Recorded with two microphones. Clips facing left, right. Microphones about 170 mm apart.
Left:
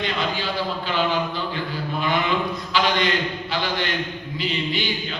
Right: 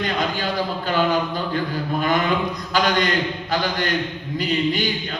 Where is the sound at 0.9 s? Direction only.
45° right (ahead or behind).